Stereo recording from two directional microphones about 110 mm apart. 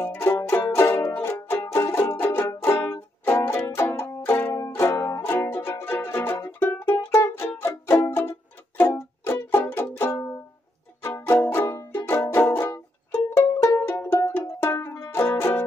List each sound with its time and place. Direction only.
0.0 s music: 20° left (ahead or behind)